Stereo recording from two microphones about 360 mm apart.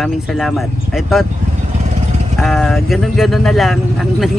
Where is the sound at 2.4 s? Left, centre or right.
Centre.